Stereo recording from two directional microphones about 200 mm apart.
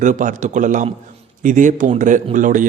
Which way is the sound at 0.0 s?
40° right (ahead or behind).